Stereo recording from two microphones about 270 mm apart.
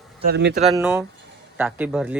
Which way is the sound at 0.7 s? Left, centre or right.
Centre.